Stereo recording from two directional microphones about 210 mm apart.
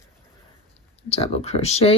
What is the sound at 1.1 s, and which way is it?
Speech, 30° left (ahead or behind).